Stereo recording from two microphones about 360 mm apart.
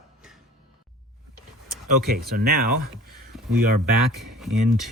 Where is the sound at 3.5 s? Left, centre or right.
Right.